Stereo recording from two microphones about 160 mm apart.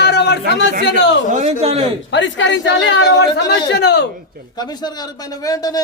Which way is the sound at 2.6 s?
90° left.